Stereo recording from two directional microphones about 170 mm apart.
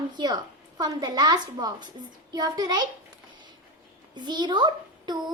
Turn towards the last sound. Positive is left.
turn(degrees=-25)  # may be behind; listen again after turning